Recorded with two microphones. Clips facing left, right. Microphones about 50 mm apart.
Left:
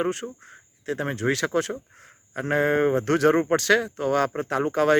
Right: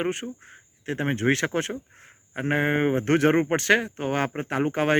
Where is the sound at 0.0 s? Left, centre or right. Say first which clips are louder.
Left 1 dB; right.